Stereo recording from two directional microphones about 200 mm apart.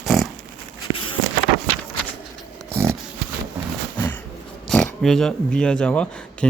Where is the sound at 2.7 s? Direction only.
10° right (ahead or behind).